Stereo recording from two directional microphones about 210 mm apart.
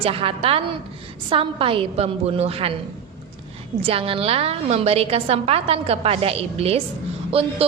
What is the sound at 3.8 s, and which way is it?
A woman's voice, 25° right (ahead or behind).